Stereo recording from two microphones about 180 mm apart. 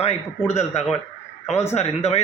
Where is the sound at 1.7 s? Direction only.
35° left (ahead or behind).